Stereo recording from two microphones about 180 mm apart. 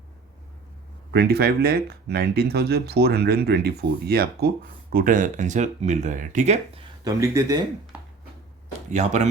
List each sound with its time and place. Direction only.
1.1 s speech: 65° right (ahead or behind); by 6.8 s 40° right (ahead or behind)
7.0 s speech: 20° right (ahead or behind)
8.9 s speech: 40° right (ahead or behind)